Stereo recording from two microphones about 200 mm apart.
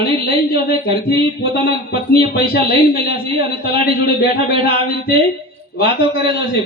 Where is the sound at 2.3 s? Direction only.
50° left (ahead or behind).